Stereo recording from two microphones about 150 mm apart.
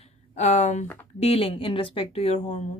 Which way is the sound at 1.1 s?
40° left (ahead or behind).